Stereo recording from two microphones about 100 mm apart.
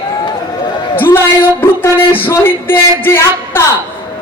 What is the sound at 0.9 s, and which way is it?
Speech, 20° left (ahead or behind).